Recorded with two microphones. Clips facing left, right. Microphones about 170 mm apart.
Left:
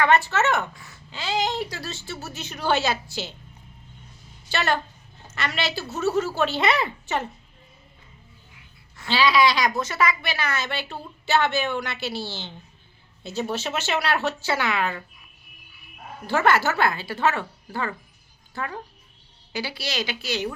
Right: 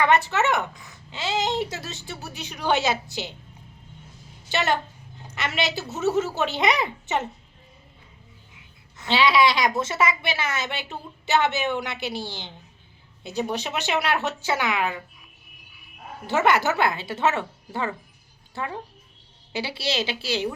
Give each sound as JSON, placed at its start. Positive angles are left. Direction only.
{"t": 0.0, "sound": "a woman's voice", "side_deg": -20}
{"t": 4.4, "sound": "a woman's voice", "side_deg": -20}
{"t": 9.0, "sound": "a woman's voice", "side_deg": -20}
{"t": 16.2, "sound": "a woman's voice", "side_deg": -20}